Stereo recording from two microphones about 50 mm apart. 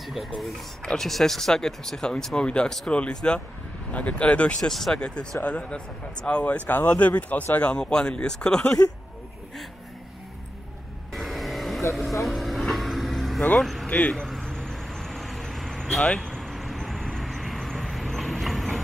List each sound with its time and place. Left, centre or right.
0.0 s speech: centre; by 4.6 s left
4.6 s speech: centre
4.9 s speech: centre
7.5 s speech: centre
11.1 s vehicle: centre
11.9 s speech: centre
12.3 s vehicle: centre
13.6 s speech: centre
13.8 s speech: left
14.4 s vehicle: centre